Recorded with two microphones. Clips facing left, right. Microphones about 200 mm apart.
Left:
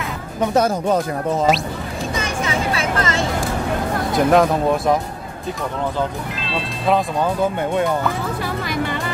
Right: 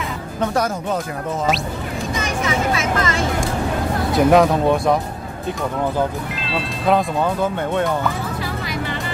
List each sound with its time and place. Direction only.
2.1 s vehicle: 30° left (ahead or behind)
4.2 s speech: centre (ahead or behind)
7.7 s speech: centre (ahead or behind)